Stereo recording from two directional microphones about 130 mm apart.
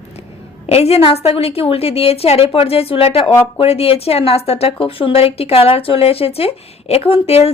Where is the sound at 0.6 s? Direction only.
50° left (ahead or behind).